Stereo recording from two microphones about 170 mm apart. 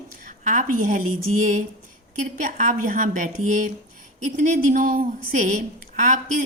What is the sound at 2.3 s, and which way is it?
A woman's voice, 50° right (ahead or behind).